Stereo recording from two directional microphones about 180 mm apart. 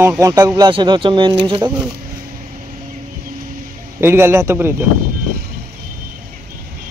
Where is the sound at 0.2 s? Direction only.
15° right (ahead or behind).